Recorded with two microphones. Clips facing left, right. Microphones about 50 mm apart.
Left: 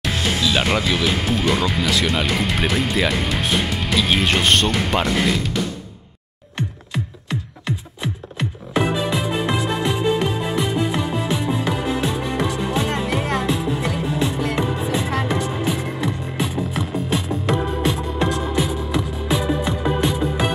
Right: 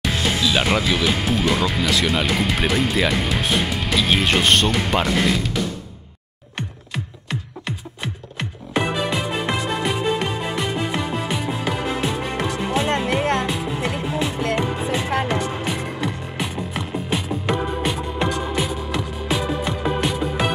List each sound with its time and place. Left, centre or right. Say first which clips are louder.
0.0 s speech: even; centre
8.7 s music: left 1 dB; centre
11.8 s music: left 1 dB; right
14.0 s music: left 2 dB; right
14.8 s music: even; right
15.4 s music: left 2 dB; centre